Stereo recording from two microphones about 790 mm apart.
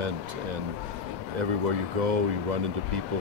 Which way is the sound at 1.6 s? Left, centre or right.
Right.